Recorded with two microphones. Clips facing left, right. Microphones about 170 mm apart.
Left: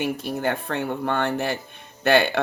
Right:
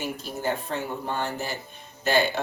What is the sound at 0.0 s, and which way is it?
Speech, 60° left (ahead or behind).